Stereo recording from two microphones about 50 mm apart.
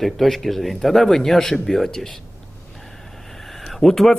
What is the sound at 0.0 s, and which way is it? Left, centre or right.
Speech, centre.